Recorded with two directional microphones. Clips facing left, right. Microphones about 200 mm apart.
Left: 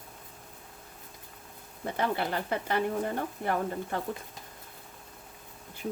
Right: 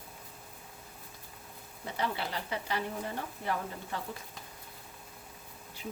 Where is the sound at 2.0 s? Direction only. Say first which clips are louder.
Left 5 dB; 55° left (ahead or behind).